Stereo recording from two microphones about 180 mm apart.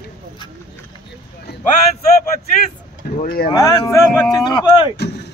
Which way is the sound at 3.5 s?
20° left (ahead or behind).